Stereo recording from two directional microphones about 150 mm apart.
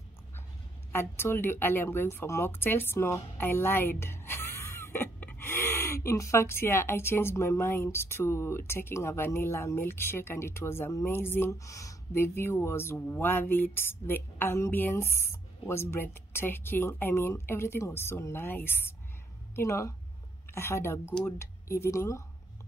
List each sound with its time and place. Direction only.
0.9 s speech: 15° left (ahead or behind)